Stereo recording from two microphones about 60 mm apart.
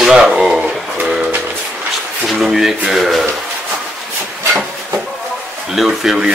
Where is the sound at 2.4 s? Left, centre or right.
Centre.